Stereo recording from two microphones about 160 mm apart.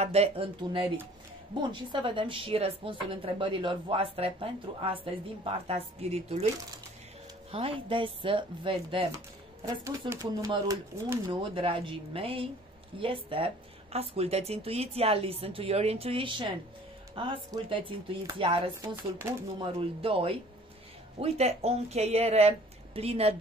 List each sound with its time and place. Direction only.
0.0 s a woman's voice: 40° right (ahead or behind)
1.6 s a woman's voice: 30° right (ahead or behind)
7.5 s a woman's voice: 35° right (ahead or behind)
9.7 s speech: 20° right (ahead or behind)
11.2 s a woman's voice: 35° right (ahead or behind)